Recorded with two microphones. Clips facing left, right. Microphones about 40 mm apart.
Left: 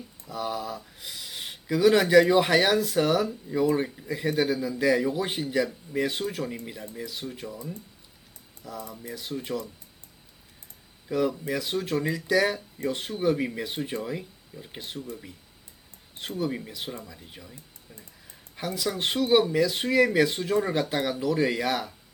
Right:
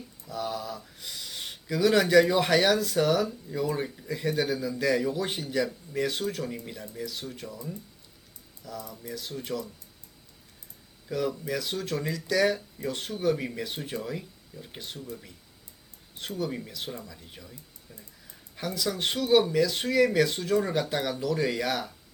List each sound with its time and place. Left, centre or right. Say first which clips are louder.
0.3 s speech: left 2 dB; centre
11.1 s speech: left 3 dB; centre
16.4 s speech: left 2 dB; centre